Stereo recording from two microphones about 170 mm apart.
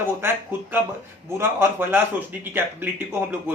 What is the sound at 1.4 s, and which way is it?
Speech, 15° right (ahead or behind).